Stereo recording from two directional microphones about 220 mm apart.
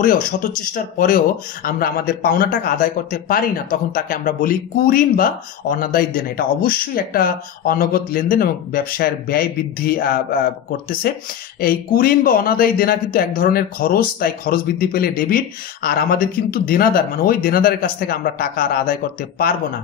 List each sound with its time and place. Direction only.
0.0 s speech: 40° left (ahead or behind)